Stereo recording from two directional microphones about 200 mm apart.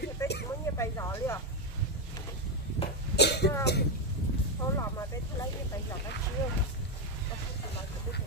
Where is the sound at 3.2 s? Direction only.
55° left (ahead or behind).